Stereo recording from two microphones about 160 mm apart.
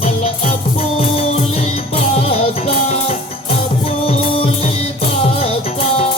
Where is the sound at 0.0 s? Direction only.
40° left (ahead or behind).